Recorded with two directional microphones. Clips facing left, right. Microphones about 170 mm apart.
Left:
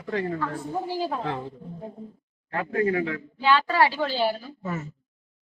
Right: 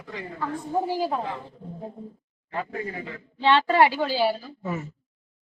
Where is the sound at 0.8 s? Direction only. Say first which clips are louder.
Right 2 dB; 15° right (ahead or behind).